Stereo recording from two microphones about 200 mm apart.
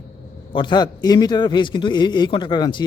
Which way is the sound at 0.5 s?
25° left (ahead or behind).